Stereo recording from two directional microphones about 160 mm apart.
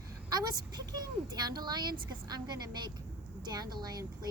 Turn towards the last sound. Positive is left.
turn(degrees=-25)  # may be behind; listen again after turning